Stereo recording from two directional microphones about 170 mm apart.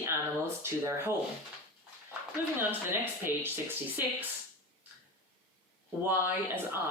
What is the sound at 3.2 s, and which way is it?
Speech, 15° right (ahead or behind).